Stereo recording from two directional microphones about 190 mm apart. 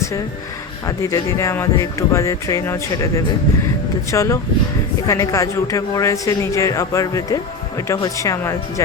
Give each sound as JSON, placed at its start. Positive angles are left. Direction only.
{"t": 0.9, "sound": "a man's voice", "side_deg": 15}
{"t": 4.1, "sound": "a man's voice", "side_deg": 15}